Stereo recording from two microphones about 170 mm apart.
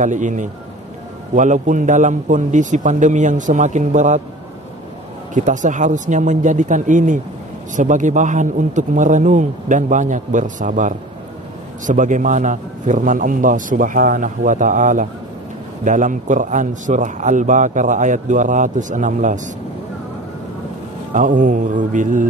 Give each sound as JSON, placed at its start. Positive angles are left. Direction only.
{"t": 0.0, "sound": "a man's voice", "side_deg": -50}
{"t": 5.3, "sound": "a man's voice", "side_deg": -45}
{"t": 21.1, "sound": "a man's voice", "side_deg": -50}